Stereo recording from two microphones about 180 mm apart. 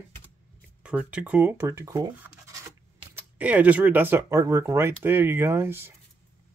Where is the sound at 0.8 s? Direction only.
10° right (ahead or behind).